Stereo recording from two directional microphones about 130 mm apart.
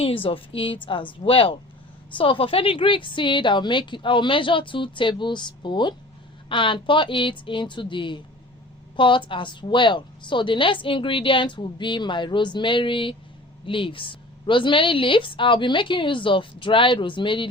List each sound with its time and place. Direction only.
0.0 s a woman's voice: 45° left (ahead or behind)